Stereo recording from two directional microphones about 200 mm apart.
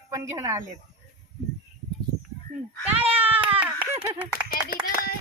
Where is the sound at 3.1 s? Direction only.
5° right (ahead or behind).